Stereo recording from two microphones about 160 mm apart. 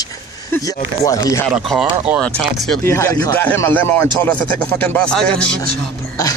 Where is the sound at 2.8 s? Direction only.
15° left (ahead or behind).